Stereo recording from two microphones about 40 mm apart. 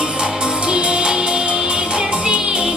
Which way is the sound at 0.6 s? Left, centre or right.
Right.